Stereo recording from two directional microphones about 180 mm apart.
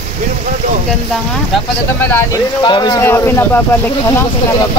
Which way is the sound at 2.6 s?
25° left (ahead or behind).